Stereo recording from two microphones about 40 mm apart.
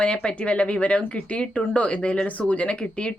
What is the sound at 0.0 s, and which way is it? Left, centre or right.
A woman's voice, left.